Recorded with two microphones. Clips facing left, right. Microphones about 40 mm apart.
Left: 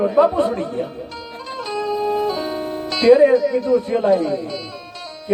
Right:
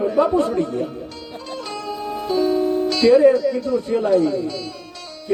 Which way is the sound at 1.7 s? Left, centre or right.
Centre.